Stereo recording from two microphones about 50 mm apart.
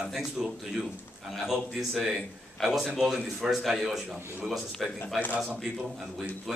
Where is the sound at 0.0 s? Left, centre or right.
Centre.